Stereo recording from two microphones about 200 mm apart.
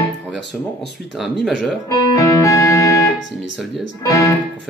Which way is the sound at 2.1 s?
15° left (ahead or behind).